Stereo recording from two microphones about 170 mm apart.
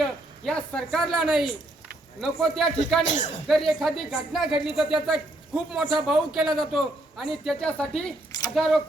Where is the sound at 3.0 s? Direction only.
45° left (ahead or behind).